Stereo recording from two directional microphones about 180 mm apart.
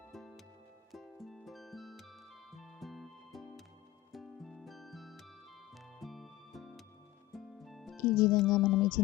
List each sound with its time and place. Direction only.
0.1 s music: centre (ahead or behind)